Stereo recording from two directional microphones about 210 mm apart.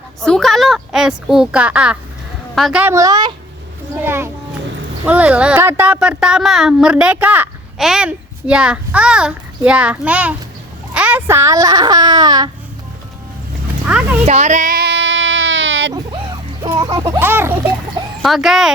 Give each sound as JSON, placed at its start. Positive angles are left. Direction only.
{"t": 0.2, "sound": "a woman's voice", "side_deg": 0}
{"t": 13.8, "sound": "speech", "side_deg": -5}
{"t": 14.3, "sound": "a sound", "side_deg": -35}
{"t": 15.9, "sound": "music", "side_deg": -20}
{"t": 18.2, "sound": "speech", "side_deg": 0}